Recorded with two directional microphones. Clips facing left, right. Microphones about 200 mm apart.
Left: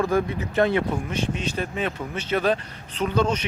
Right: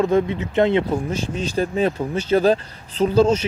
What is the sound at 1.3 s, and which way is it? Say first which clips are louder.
Speech: right 6 dB; 35° right (ahead or behind).